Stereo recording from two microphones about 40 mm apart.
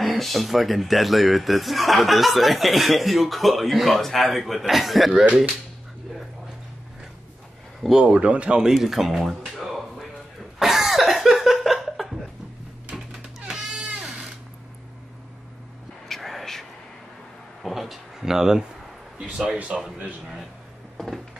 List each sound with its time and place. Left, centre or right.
0.0 s speech: centre
8.0 s speech: right
8.7 s a sound: centre
13.9 s sewing machine: centre
16.1 s a sound: centre
17.6 s a sound: centre
18.2 s a man's voice: centre
19.8 s a man's voice: centre
21.0 s cupboard open or close: centre